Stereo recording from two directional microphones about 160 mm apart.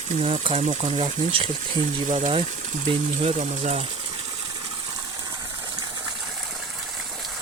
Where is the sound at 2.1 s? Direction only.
50° right (ahead or behind).